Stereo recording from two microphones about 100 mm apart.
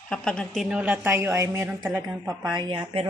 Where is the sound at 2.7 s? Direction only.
60° right (ahead or behind).